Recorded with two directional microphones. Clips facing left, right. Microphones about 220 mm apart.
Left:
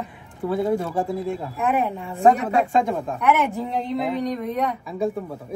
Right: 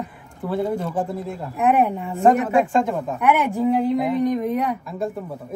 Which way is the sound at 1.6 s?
10° right (ahead or behind).